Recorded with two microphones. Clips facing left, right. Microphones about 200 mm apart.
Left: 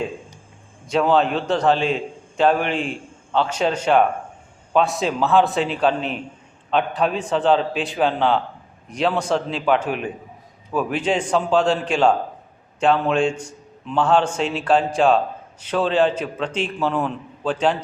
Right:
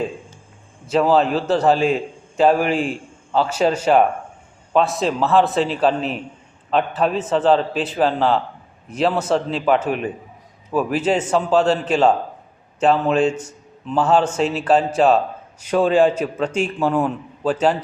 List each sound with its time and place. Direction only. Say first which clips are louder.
0.9 s a man's voice: right 2 dB; 5° right (ahead or behind)